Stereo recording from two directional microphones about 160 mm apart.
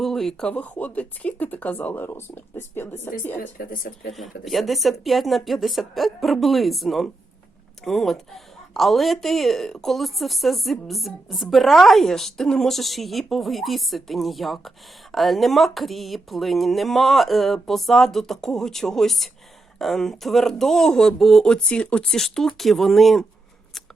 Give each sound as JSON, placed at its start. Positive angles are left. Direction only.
{"t": 0.0, "sound": "speech", "side_deg": 0}
{"t": 3.4, "sound": "speech", "side_deg": 60}
{"t": 4.1, "sound": "speech", "side_deg": 0}